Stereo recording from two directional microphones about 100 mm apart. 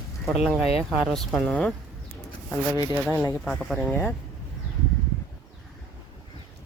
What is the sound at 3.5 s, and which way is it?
Speech, 5° left (ahead or behind).